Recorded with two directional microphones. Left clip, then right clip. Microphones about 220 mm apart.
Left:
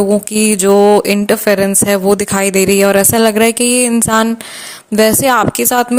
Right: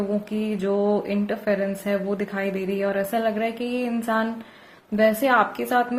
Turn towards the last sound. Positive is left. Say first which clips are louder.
# left 10 dB
turn(degrees=45)  # may be behind; listen again after turning